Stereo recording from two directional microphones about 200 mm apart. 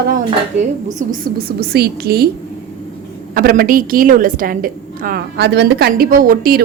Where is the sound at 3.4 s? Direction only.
45° right (ahead or behind).